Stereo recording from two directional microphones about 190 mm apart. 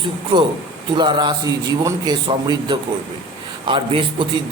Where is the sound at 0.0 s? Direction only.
25° right (ahead or behind).